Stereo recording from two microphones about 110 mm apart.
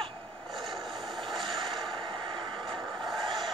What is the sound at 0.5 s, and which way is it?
Vehicle, centre (ahead or behind).